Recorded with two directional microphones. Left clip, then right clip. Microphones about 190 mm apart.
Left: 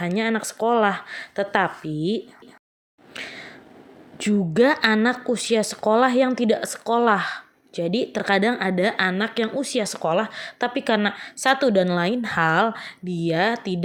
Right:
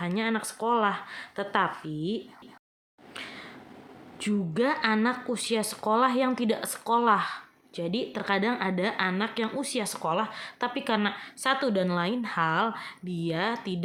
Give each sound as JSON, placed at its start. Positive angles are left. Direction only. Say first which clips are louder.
{"t": 0.0, "sound": "speech", "louder": "left 6 dB", "side_deg": 30}
{"t": 3.2, "sound": "a sound", "louder": "left 6 dB", "side_deg": 25}
{"t": 4.2, "sound": "speech", "louder": "left 9 dB", "side_deg": 30}